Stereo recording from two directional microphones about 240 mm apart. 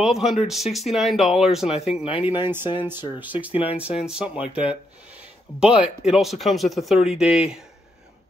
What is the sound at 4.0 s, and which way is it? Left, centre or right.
Speech, centre.